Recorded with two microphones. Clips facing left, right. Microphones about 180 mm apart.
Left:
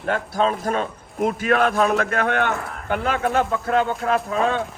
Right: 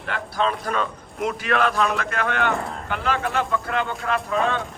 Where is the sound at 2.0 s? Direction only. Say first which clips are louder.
Left 4 dB; 55° left (ahead or behind).